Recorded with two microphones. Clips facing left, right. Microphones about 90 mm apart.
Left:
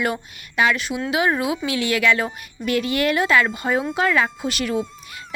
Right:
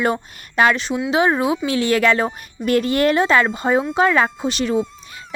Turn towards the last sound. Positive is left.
turn(degrees=-25)  # may be behind; listen again after turning